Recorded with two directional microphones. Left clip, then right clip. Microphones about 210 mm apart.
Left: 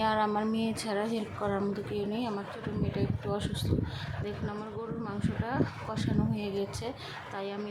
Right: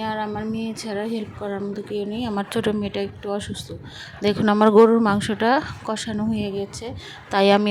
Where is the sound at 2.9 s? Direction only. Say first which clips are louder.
Right 7 dB; 35° right (ahead or behind).